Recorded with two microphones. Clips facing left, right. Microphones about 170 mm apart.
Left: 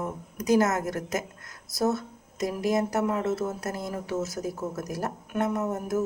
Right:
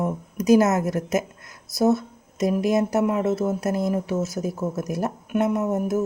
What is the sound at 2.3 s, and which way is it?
Speech, 20° right (ahead or behind).